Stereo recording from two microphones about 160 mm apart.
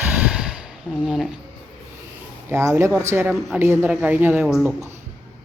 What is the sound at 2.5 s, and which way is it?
Speech, 20° right (ahead or behind).